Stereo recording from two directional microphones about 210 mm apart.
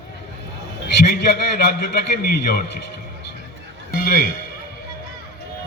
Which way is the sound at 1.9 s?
45° left (ahead or behind).